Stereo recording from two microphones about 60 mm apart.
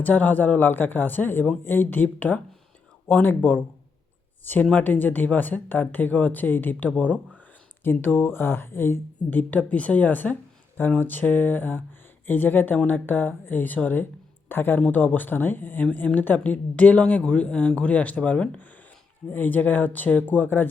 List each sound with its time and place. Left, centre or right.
0.0 s speech: left
4.7 s a woman's voice: left
9.4 s a woman's voice: left